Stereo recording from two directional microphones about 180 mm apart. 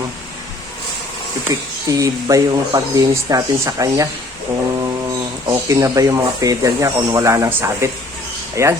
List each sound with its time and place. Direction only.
1.9 s speech: 20° right (ahead or behind)
5.5 s speech: 20° right (ahead or behind)